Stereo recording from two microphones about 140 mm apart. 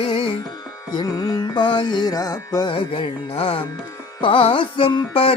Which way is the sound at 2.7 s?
40° left (ahead or behind).